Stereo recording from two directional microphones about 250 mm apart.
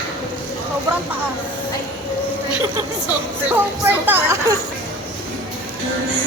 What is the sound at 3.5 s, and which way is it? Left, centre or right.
Speech, centre.